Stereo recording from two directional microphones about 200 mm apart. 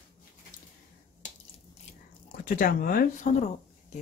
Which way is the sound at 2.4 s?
45° left (ahead or behind).